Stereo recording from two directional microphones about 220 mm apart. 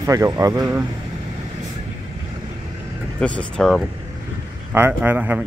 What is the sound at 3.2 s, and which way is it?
Speech, 5° left (ahead or behind).